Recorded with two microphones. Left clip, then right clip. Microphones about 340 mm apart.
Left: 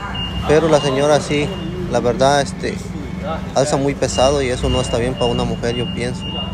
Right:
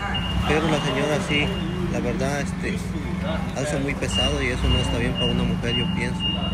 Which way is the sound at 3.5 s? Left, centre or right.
Left.